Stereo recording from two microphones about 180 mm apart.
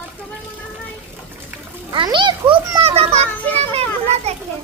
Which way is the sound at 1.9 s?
25° right (ahead or behind).